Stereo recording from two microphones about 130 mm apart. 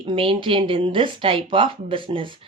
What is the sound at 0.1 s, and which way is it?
Speech, 40° right (ahead or behind).